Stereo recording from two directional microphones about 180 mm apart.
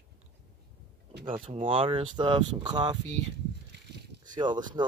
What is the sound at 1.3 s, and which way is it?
Speech, 30° right (ahead or behind).